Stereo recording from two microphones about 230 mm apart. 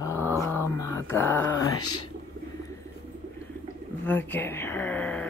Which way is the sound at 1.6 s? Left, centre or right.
Left.